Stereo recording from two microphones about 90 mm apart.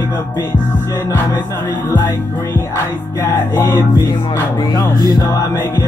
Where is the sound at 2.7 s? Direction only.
30° left (ahead or behind).